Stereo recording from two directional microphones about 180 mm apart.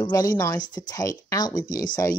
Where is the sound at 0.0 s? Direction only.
20° left (ahead or behind).